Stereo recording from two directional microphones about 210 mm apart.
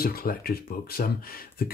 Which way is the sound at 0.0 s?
45° left (ahead or behind).